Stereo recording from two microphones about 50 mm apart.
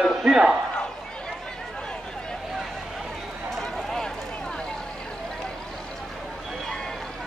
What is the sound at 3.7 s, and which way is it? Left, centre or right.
Run, centre.